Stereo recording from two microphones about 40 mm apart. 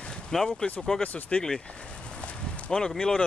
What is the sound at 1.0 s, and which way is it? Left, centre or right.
Speech, left.